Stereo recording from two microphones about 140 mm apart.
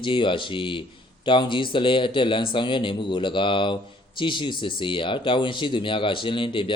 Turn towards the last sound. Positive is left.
turn(degrees=35)  # may be behind; listen again after turning